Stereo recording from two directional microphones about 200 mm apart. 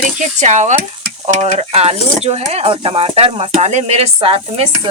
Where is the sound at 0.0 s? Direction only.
35° right (ahead or behind).